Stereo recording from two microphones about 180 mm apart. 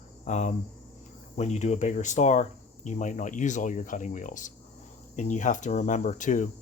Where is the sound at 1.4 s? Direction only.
40° left (ahead or behind).